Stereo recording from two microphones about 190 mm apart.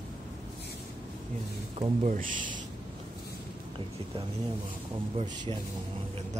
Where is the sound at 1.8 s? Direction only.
40° right (ahead or behind).